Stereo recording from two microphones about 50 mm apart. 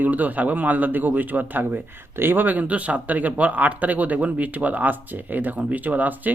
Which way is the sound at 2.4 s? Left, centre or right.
Right.